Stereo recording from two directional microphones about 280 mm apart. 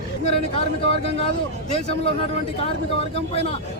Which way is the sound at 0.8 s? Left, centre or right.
Left.